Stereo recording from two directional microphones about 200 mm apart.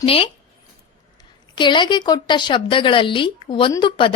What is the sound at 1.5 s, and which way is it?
A woman's voice, 25° left (ahead or behind).